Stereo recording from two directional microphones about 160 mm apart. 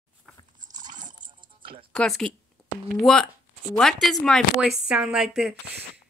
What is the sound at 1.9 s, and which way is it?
A woman's voice, 5° left (ahead or behind).